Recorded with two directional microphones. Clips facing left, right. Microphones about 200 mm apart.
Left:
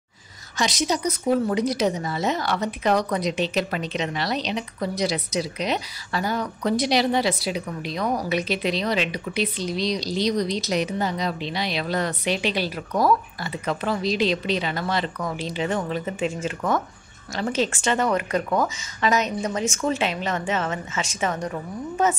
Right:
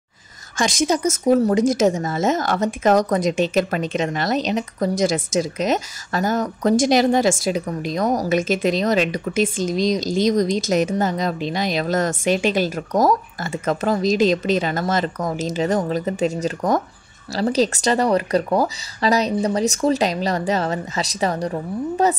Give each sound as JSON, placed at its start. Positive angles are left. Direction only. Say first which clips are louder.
{"t": 0.6, "sound": "speech", "louder": "right 4 dB", "side_deg": -50}